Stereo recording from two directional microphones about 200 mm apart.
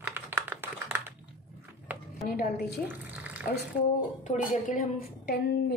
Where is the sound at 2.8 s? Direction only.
10° right (ahead or behind).